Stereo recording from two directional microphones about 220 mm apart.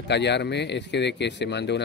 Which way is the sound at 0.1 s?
50° left (ahead or behind).